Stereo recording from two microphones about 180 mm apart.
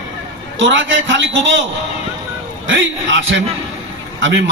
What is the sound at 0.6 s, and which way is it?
A man's voice, 90° right.